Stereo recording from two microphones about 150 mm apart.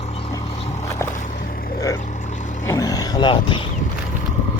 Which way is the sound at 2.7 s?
25° left (ahead or behind).